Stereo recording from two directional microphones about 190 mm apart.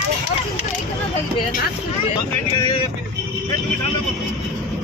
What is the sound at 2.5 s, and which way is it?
Vehicle, 25° left (ahead or behind).